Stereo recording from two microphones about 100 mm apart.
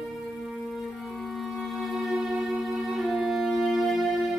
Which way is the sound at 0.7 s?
Centre (ahead or behind).